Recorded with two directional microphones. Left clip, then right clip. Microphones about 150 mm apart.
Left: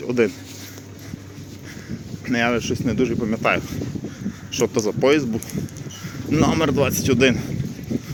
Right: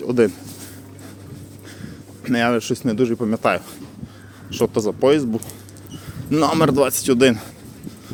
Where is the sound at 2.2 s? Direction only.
25° right (ahead or behind).